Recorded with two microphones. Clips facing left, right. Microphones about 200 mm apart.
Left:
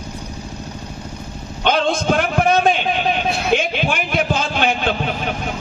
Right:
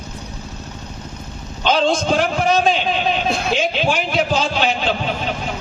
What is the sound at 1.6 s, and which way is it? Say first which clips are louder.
A man's voice: right 1 dB; 55° left (ahead or behind).